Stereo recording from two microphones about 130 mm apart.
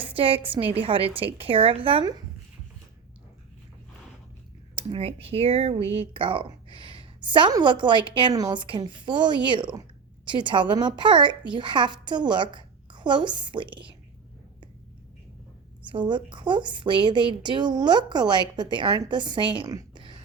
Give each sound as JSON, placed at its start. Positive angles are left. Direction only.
{"t": 0.1, "sound": "a woman's voice", "side_deg": -45}
{"t": 4.7, "sound": "a woman's voice", "side_deg": -45}
{"t": 5.9, "sound": "a sound", "side_deg": -45}
{"t": 7.5, "sound": "a woman's voice", "side_deg": -35}
{"t": 15.9, "sound": "speech", "side_deg": -40}